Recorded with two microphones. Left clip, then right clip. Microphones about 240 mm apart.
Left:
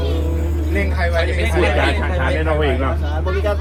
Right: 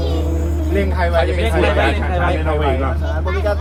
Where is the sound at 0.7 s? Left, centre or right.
Right.